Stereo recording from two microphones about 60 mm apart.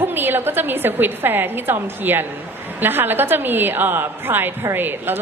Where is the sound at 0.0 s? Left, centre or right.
Right.